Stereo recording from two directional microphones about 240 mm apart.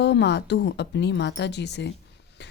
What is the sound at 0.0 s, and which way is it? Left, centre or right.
A woman's voice, left.